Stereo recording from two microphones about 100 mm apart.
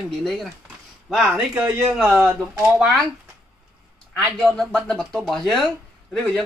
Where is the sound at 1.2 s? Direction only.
20° right (ahead or behind).